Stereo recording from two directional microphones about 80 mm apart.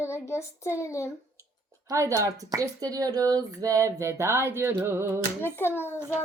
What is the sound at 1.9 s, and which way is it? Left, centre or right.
Speech, right.